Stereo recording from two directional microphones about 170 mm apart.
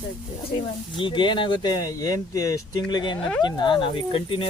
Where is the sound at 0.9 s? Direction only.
30° left (ahead or behind).